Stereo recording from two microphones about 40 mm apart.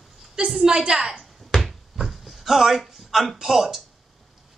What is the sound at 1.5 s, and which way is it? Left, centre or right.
Cupboard open or close, centre.